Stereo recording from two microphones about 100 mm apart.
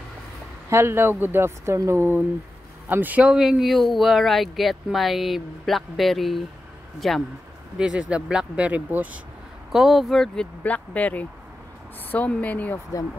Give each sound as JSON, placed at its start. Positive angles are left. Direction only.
{"t": 0.7, "sound": "speech", "side_deg": -25}
{"t": 7.7, "sound": "speech", "side_deg": -10}
{"t": 9.7, "sound": "speech", "side_deg": 0}